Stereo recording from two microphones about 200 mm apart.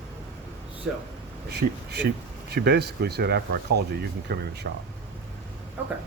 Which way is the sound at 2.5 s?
55° right (ahead or behind).